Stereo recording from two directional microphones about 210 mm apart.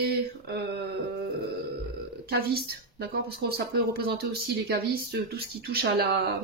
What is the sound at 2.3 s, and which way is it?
Speech, 50° right (ahead or behind).